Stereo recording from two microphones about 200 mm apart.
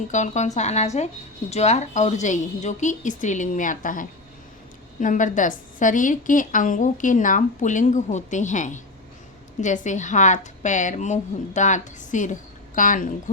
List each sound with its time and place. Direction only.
0.1 s a woman's voice: 35° left (ahead or behind)